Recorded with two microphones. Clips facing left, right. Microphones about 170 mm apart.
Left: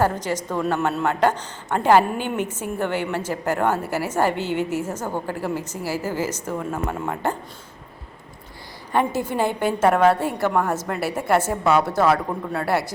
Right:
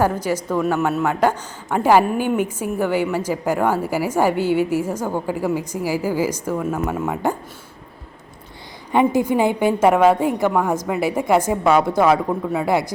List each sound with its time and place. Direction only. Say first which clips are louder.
0.0 s a woman's voice: right 2 dB; 10° right (ahead or behind)
8.9 s a woman's voice: right 5 dB; 15° right (ahead or behind)